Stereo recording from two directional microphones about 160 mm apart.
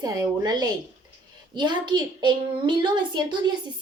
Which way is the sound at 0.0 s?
25° right (ahead or behind).